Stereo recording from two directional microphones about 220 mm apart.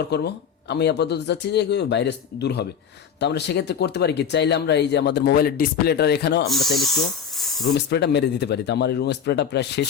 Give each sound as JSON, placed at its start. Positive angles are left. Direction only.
{"t": 0.1, "sound": "speech", "side_deg": 50}
{"t": 6.5, "sound": "speech", "side_deg": 0}
{"t": 7.3, "sound": "spray", "side_deg": 0}
{"t": 7.9, "sound": "speech", "side_deg": 50}